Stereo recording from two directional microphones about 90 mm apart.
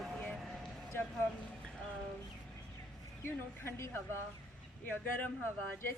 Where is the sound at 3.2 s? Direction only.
30° left (ahead or behind).